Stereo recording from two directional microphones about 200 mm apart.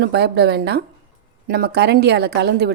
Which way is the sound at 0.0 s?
55° right (ahead or behind).